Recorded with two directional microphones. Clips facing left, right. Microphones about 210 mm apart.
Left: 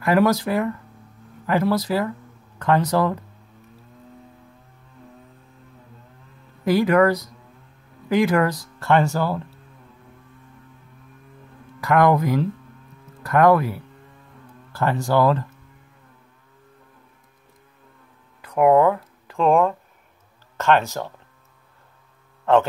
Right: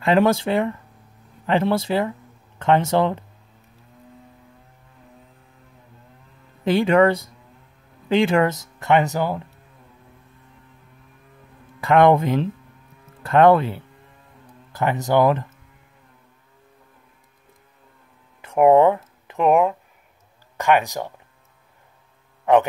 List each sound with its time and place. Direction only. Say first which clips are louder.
0.0 s speech: right 1 dB; 25° right (ahead or behind)
6.6 s speech: right 1 dB; 25° right (ahead or behind)
11.8 s speech: right 2 dB; 25° right (ahead or behind)
18.4 s a sound: right 2 dB; 25° right (ahead or behind)
20.5 s speech: even; 15° right (ahead or behind)
22.4 s a sound: right 1 dB; 15° right (ahead or behind)